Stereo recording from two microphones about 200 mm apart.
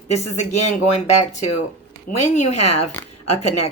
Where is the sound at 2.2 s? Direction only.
35° left (ahead or behind).